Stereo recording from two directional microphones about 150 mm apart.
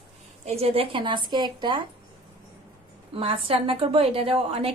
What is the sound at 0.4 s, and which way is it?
A woman's voice, 45° right (ahead or behind).